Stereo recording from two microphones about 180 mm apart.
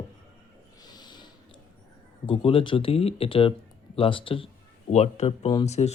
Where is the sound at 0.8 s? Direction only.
20° left (ahead or behind).